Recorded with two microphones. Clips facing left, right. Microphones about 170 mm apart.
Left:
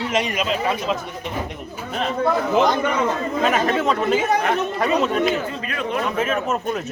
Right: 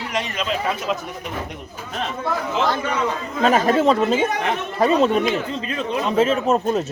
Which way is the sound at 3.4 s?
30° right (ahead or behind).